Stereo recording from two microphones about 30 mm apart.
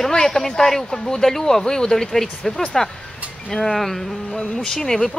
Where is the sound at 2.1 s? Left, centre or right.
Centre.